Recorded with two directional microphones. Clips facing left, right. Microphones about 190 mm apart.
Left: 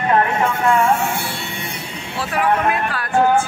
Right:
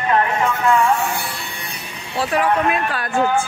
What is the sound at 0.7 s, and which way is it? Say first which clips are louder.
Speech: even; 25° left (ahead or behind).